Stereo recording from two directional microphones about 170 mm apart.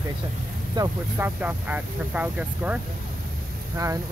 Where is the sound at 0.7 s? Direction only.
15° right (ahead or behind).